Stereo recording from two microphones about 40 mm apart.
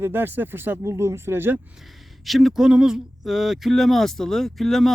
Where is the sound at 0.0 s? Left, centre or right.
Right.